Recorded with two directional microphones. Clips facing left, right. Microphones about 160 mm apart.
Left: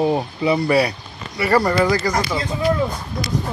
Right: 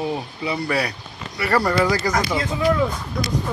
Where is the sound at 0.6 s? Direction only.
10° left (ahead or behind).